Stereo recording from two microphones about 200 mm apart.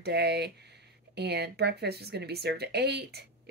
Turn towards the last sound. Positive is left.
turn(degrees=-55)  # may be behind; listen again after turning